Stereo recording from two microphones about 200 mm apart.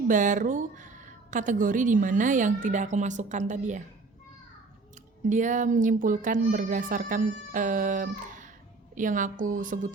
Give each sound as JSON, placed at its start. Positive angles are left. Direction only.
{"t": 0.1, "sound": "a woman's voice", "side_deg": -40}
{"t": 5.3, "sound": "a woman's voice", "side_deg": -40}